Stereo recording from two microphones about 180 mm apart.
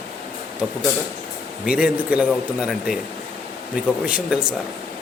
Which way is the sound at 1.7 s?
5° right (ahead or behind).